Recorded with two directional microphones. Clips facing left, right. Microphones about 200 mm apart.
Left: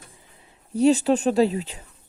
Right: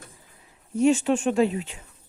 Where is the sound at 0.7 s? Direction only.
35° left (ahead or behind).